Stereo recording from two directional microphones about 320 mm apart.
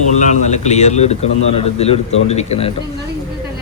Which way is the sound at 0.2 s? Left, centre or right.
Left.